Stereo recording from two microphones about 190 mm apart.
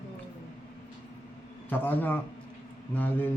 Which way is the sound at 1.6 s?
10° left (ahead or behind).